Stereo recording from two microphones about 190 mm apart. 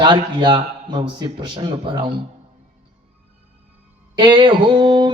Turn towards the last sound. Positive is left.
turn(degrees=-25)  # may be behind; listen again after turning